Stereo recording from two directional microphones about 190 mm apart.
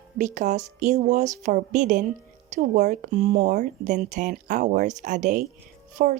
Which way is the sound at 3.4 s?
45° right (ahead or behind).